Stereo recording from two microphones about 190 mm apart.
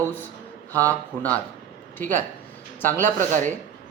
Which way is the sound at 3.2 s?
40° right (ahead or behind).